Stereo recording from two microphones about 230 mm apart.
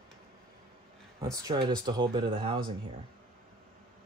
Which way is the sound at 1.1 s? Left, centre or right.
Centre.